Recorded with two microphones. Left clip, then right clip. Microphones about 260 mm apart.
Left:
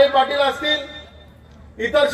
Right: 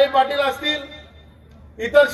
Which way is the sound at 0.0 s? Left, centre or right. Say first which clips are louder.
Left 1 dB; right.